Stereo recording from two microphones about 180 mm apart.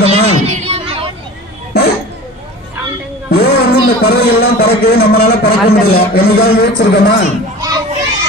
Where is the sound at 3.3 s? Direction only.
65° left (ahead or behind).